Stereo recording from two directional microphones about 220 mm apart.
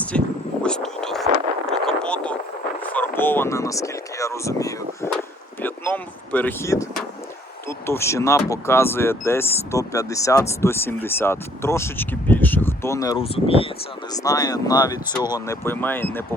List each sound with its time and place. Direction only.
0.6 s a sound: 5° left (ahead or behind)
5.6 s speech: 10° left (ahead or behind)
13.2 s speech: 25° left (ahead or behind); by 16.2 s 10° left (ahead or behind)